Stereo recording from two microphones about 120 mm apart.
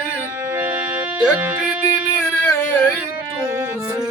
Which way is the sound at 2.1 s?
20° left (ahead or behind).